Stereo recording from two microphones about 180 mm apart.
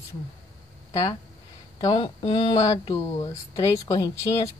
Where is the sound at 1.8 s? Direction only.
25° left (ahead or behind).